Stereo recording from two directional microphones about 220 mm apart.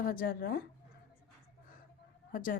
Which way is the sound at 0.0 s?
40° left (ahead or behind).